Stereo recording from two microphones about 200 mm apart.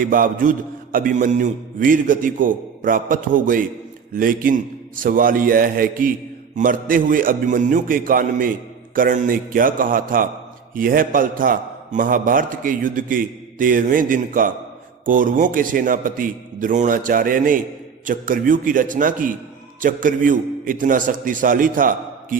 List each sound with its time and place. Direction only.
0.0 s a man's voice: 45° right (ahead or behind)